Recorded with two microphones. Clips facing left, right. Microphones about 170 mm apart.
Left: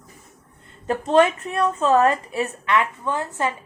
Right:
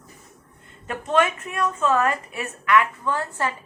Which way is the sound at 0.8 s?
30° left (ahead or behind).